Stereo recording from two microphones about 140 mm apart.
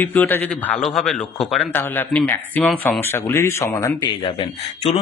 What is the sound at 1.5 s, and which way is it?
A man's voice, 10° left (ahead or behind).